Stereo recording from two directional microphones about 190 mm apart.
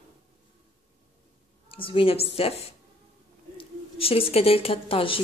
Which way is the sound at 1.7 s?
25° left (ahead or behind).